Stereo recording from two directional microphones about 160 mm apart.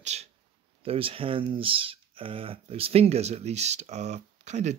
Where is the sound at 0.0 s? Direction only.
45° right (ahead or behind).